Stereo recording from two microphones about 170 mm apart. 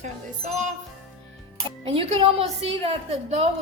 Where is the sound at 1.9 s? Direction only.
35° right (ahead or behind).